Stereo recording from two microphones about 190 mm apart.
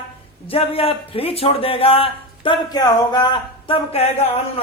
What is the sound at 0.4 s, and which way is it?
A man's voice, 30° left (ahead or behind).